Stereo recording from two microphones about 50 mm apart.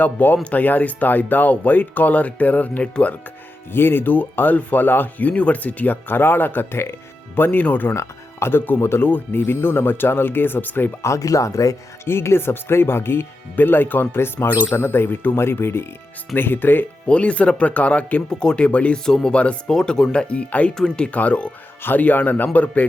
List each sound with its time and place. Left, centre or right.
0.0 s speech: left
3.7 s speech: left
7.9 s speech: left
9.0 s speech: left
11.0 s speech: left
12.0 s speech: left
15.4 s speech: left
17.1 s speech: left
18.3 s speech: centre
19.0 s speech: centre
20.7 s speech: centre
21.1 s speech: left
21.8 s speech: left